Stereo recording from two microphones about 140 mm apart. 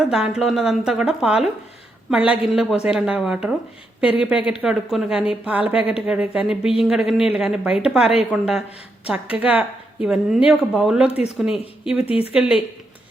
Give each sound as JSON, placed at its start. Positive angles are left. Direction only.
{"t": 0.0, "sound": "a woman's voice", "side_deg": -5}
{"t": 12.0, "sound": "speech", "side_deg": 45}
{"t": 12.3, "sound": "a woman's voice", "side_deg": -5}